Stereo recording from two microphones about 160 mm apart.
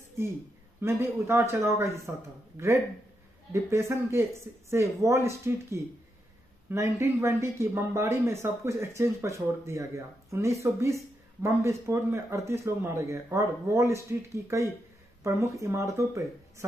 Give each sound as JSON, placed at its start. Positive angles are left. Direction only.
{"t": 0.7, "sound": "speech", "side_deg": -15}